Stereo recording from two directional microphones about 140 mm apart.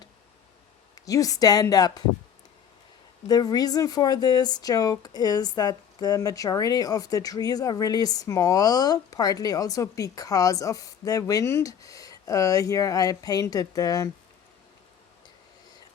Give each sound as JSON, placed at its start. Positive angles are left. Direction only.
{"t": 1.0, "sound": "speech", "side_deg": 25}
{"t": 3.2, "sound": "speech", "side_deg": 30}